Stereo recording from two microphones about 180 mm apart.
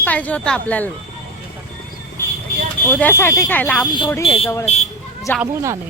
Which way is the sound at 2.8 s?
10° left (ahead or behind).